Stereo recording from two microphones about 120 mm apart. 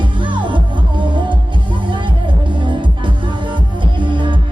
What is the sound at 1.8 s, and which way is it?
Music, 40° right (ahead or behind).